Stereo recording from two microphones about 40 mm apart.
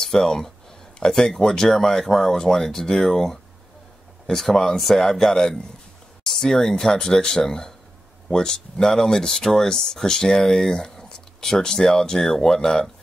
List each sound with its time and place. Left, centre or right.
0.0 s speech: centre